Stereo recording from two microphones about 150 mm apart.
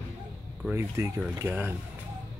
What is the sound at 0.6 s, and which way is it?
Speech, 15° right (ahead or behind).